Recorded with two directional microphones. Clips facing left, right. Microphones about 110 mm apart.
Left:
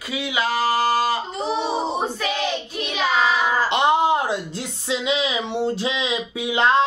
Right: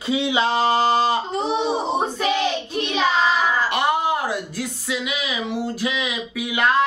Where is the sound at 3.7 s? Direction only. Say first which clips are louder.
Left 3 dB; 20° left (ahead or behind).